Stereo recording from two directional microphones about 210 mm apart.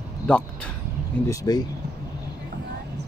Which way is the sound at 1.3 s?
15° left (ahead or behind).